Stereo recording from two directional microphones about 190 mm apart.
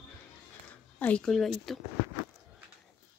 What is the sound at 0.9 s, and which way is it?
Speech, 5° left (ahead or behind).